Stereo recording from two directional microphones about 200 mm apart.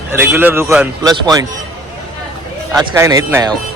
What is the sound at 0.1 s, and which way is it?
Speech, 10° right (ahead or behind).